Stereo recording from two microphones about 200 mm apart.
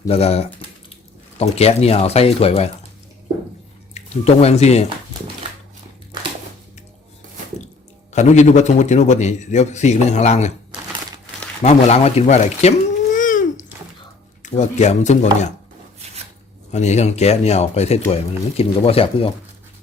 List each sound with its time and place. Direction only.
0.1 s a man's voice: 30° left (ahead or behind)
3.9 s speech: 30° left (ahead or behind)
8.1 s a man's voice: 35° left (ahead or behind)
11.6 s a sound: 30° left (ahead or behind)
14.4 s a man's voice: 35° left (ahead or behind)
16.7 s a man's voice: 35° left (ahead or behind)